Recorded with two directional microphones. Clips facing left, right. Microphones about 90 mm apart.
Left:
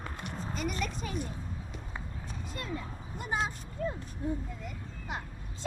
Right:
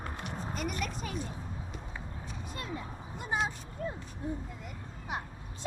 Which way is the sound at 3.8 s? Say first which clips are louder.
Left 3 dB; 25° right (ahead or behind).